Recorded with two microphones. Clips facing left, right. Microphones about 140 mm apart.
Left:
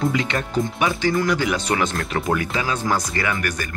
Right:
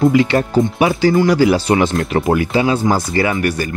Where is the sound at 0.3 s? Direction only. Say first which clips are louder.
Right 8 dB; 40° right (ahead or behind).